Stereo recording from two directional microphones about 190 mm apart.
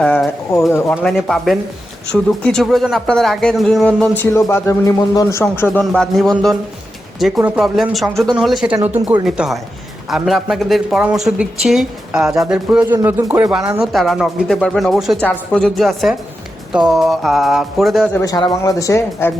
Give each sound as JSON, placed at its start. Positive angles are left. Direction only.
{"t": 0.0, "sound": "bird", "side_deg": 5}
{"t": 0.7, "sound": "speech", "side_deg": 10}
{"t": 4.2, "sound": "speech", "side_deg": 15}
{"t": 18.1, "sound": "speech", "side_deg": 15}